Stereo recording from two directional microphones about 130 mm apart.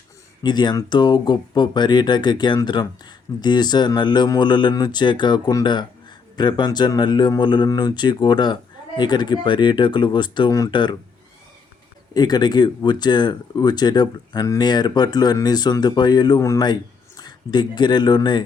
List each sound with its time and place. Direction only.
0.4 s speech: 35° left (ahead or behind)
12.1 s speech: 30° left (ahead or behind)